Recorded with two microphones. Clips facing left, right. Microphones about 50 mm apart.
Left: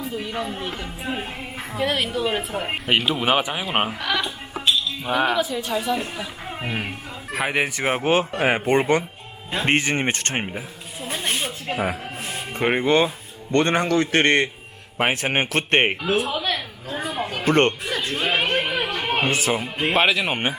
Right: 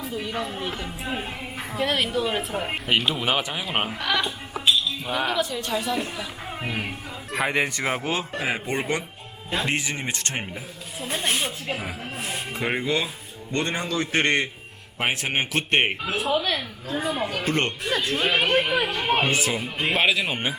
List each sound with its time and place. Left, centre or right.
0.0 s a woman's voice: centre
4.6 s a sound: centre
5.0 s speech: centre
7.9 s a woman's voice: left
11.2 s a sound: centre
12.5 s a woman's voice: left
18.2 s chatter: left
19.5 s a woman's voice: left